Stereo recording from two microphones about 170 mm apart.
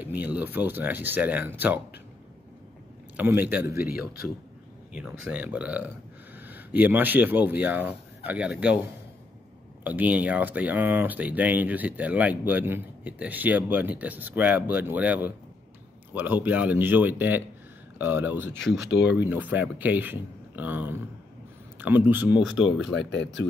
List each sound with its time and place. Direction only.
0.0 s speech: 10° right (ahead or behind)
3.2 s speech: 10° right (ahead or behind)
4.9 s speech: 5° right (ahead or behind)
9.8 s speech: 10° right (ahead or behind)
18.6 s speech: 90° left
19.1 s speech: 10° right (ahead or behind)
22.9 s speech: 90° left